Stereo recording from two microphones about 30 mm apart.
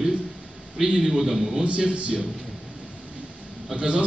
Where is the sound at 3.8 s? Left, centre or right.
Right.